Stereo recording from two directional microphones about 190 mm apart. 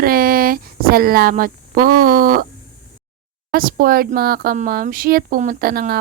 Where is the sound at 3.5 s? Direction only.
50° right (ahead or behind).